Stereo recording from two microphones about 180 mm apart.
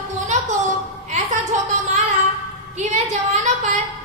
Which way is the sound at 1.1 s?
40° right (ahead or behind).